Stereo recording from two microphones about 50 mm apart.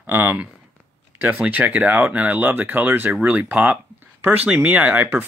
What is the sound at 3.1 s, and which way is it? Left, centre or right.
Speech, right.